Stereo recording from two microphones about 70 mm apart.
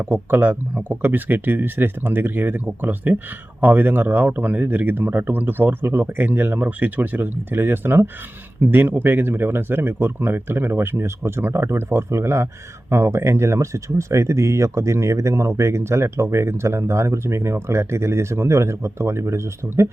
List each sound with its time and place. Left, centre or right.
0.0 s speech: right